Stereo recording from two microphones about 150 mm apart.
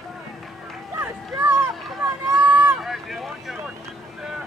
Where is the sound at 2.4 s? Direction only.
15° right (ahead or behind).